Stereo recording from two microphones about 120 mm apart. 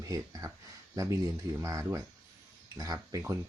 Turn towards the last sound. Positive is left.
turn(degrees=-25)  # may be behind; listen again after turning